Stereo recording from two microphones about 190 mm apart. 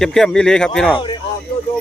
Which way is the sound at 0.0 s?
5° left (ahead or behind).